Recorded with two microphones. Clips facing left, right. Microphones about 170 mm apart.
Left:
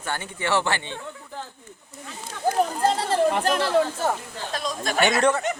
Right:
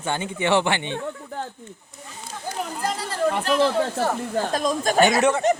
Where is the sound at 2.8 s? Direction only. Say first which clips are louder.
Left 4 dB; 30° left (ahead or behind).